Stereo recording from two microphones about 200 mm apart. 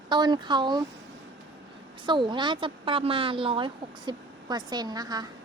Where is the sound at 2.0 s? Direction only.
25° right (ahead or behind).